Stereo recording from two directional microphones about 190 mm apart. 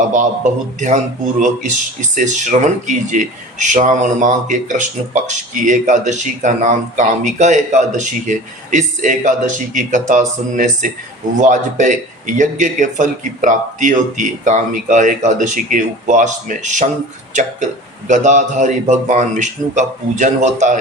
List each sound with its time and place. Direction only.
0.1 s a man's voice: 40° right (ahead or behind)
18.1 s a man's voice: 40° right (ahead or behind)